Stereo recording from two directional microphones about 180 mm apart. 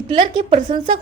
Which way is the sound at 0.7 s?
25° right (ahead or behind).